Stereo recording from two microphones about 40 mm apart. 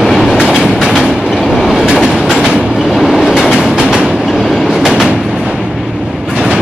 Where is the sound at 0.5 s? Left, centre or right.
Centre.